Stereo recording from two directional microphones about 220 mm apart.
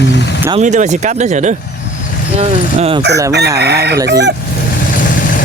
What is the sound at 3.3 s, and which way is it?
Chicken, 50° right (ahead or behind).